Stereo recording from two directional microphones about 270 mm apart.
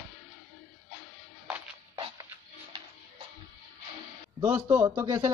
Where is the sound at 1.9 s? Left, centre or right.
Centre.